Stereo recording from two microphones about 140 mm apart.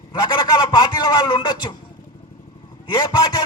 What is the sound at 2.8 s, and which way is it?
Speech, 30° left (ahead or behind).